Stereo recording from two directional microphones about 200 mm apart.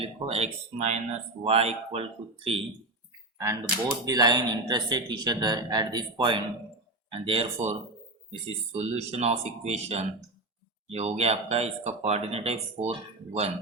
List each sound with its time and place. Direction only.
0.0 s speech: 30° right (ahead or behind)
3.3 s speech: 15° right (ahead or behind)